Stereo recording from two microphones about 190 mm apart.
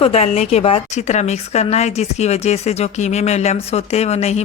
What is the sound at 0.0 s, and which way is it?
Speech, 35° left (ahead or behind).